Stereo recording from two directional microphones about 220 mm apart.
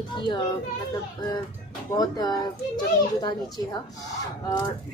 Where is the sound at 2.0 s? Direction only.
20° left (ahead or behind).